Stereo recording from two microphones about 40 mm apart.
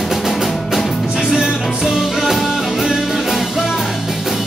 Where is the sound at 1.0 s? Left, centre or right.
Centre.